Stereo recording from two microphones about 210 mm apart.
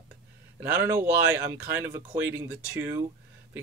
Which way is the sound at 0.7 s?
10° right (ahead or behind).